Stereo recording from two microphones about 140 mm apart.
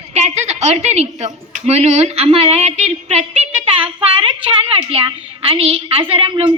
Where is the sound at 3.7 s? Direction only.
40° right (ahead or behind).